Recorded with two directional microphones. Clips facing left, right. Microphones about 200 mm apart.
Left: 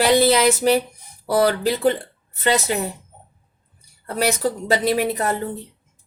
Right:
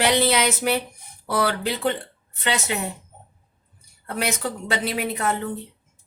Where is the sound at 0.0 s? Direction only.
35° left (ahead or behind).